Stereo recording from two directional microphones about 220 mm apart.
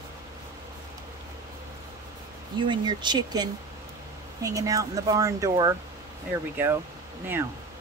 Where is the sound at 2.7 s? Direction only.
20° right (ahead or behind).